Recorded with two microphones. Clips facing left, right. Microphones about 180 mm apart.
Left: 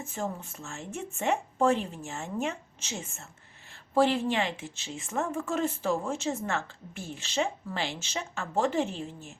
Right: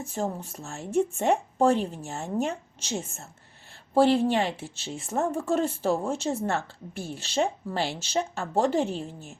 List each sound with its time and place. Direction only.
0.0 s a woman's voice: 35° right (ahead or behind)